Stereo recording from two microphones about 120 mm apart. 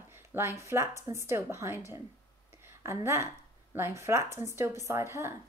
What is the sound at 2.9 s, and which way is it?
Speech, 25° right (ahead or behind).